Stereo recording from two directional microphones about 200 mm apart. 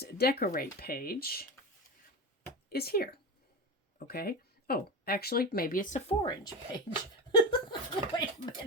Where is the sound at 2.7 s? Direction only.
50° left (ahead or behind).